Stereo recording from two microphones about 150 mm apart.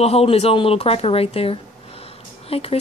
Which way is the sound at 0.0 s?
40° left (ahead or behind).